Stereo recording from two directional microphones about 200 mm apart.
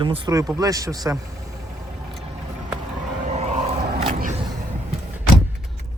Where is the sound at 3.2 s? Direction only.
35° right (ahead or behind).